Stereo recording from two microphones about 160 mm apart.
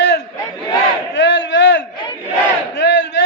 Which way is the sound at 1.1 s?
90° left.